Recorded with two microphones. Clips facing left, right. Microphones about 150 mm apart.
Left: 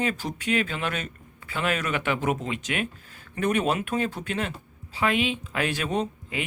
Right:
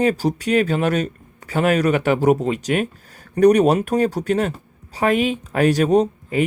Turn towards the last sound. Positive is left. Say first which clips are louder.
# right 11 dB
turn(degrees=-40)  # may be behind; listen again after turning